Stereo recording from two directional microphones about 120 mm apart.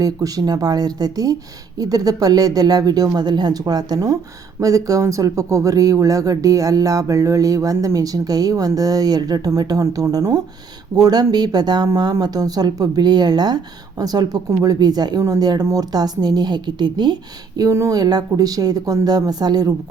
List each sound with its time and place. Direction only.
0.0 s speech: 30° right (ahead or behind)
17.6 s speech: 25° right (ahead or behind)